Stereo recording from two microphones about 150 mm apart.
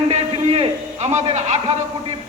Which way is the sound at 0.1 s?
45° right (ahead or behind).